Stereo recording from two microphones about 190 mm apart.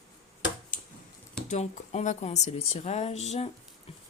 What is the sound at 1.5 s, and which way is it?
Speech, 40° left (ahead or behind).